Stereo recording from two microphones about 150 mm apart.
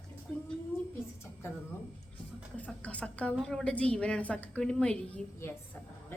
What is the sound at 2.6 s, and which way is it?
A woman's voice, 10° left (ahead or behind).